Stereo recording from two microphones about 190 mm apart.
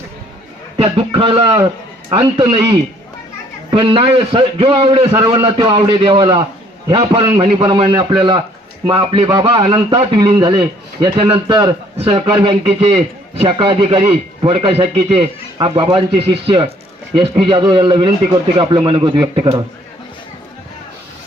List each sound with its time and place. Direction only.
0.8 s a man's voice: 30° right (ahead or behind)